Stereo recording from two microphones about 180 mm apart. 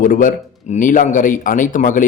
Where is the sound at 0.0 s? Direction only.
50° left (ahead or behind).